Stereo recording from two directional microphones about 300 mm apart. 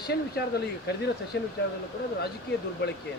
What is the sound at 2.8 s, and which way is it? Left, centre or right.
Speech, left.